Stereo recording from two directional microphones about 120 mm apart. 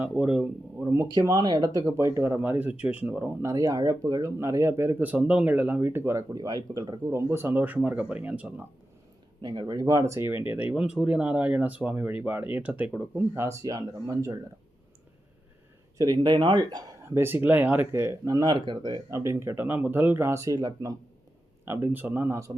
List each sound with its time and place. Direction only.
0.0 s speech: 10° right (ahead or behind)
0.9 s speech: 25° right (ahead or behind)
1.8 s speech: 25° right (ahead or behind)
3.4 s speech: 30° right (ahead or behind)
7.1 s speech: 20° right (ahead or behind)
9.4 s speech: 35° right (ahead or behind); by 13.2 s 10° right (ahead or behind)
13.3 s speech: 25° right (ahead or behind)
16.0 s speech: 35° right (ahead or behind)
17.2 s speech: 20° right (ahead or behind)
21.6 s speech: 20° right (ahead or behind)